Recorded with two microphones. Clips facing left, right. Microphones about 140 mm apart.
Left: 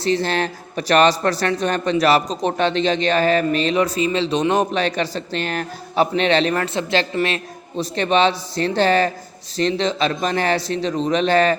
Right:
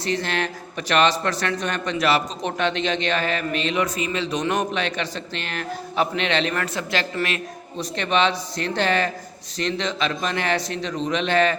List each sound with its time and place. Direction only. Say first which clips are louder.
0.0 s a man's voice: left 5 dB; 30° left (ahead or behind)